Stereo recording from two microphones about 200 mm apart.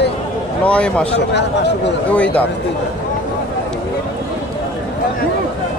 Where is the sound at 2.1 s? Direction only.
5° left (ahead or behind).